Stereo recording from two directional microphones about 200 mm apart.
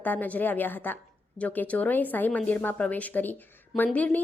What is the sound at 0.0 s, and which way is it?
Speech, 10° left (ahead or behind).